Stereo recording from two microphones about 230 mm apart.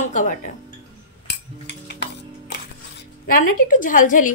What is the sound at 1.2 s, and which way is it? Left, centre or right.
Music, left.